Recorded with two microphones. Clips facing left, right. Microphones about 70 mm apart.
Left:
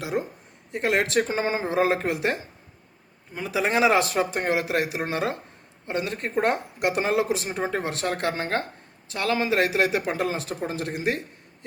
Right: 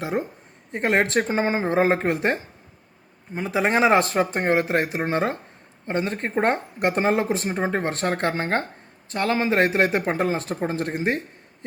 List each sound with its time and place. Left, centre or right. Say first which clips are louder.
0.0 s speech: right 2 dB; right